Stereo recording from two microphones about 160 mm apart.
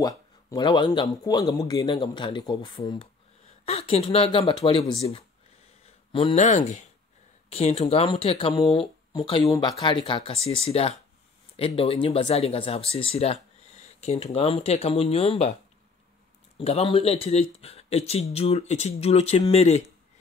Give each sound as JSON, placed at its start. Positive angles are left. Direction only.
{"t": 0.0, "sound": "speech", "side_deg": 25}
{"t": 6.3, "sound": "speech", "side_deg": 50}
{"t": 16.5, "sound": "speech", "side_deg": 40}